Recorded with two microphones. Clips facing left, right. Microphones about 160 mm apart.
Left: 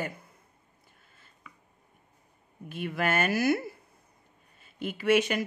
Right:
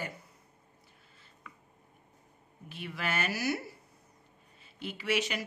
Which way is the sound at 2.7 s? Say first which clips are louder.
Left 7 dB; 50° left (ahead or behind).